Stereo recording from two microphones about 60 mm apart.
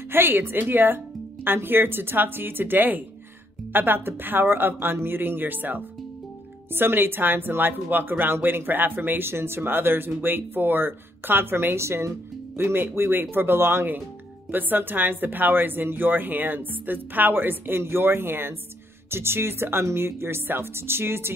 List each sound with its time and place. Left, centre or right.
0.1 s speech: right